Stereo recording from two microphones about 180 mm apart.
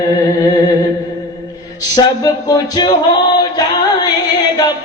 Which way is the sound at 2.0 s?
20° left (ahead or behind).